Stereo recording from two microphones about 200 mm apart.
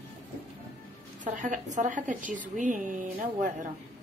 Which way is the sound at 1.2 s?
40° right (ahead or behind).